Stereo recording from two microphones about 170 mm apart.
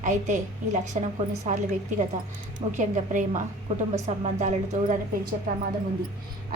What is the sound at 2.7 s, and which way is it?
A woman's voice, 50° right (ahead or behind).